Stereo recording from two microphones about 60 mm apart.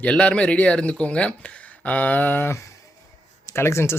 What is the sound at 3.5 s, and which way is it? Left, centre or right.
Speech, left.